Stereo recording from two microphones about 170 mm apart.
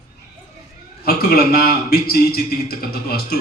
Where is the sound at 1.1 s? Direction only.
60° left (ahead or behind).